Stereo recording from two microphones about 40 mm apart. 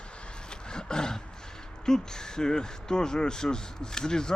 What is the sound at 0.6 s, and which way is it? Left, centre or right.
Speech, centre.